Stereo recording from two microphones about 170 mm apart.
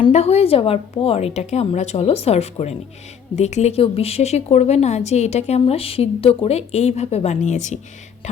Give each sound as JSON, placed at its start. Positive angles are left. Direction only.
{"t": 0.0, "sound": "speech", "side_deg": 40}